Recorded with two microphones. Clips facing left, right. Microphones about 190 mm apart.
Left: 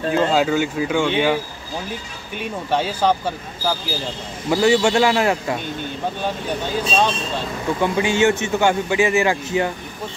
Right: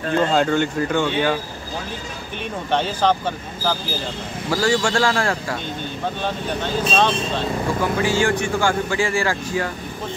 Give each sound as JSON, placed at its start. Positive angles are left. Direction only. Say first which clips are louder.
{"t": 0.1, "sound": "speech", "louder": "even", "side_deg": 5}
{"t": 2.7, "sound": "speech", "louder": "even", "side_deg": 10}
{"t": 4.5, "sound": "speech", "louder": "left 4 dB", "side_deg": 20}
{"t": 7.8, "sound": "speech", "louder": "left 4 dB", "side_deg": 20}